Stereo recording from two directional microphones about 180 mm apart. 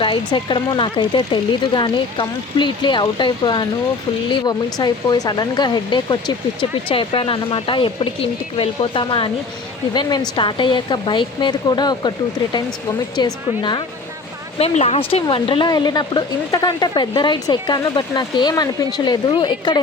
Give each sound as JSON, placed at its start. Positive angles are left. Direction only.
{"t": 0.0, "sound": "speech", "side_deg": 25}
{"t": 13.1, "sound": "speech", "side_deg": 25}